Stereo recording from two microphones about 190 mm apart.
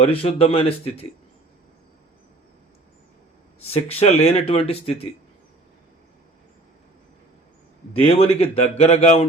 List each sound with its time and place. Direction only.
0.0 s speech: 30° left (ahead or behind)
3.6 s speech: 30° left (ahead or behind)
7.9 s speech: 30° left (ahead or behind)